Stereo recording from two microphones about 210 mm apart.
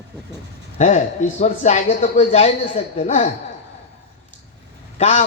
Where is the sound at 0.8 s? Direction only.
35° left (ahead or behind).